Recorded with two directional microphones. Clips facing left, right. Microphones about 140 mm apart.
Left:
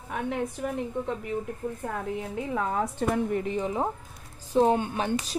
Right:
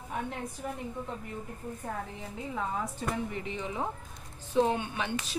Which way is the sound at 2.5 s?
65° left (ahead or behind).